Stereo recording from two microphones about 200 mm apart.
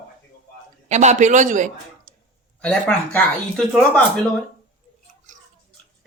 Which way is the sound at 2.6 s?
5° left (ahead or behind).